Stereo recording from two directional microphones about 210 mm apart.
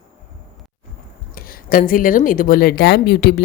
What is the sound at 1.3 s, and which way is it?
Speech, 45° left (ahead or behind).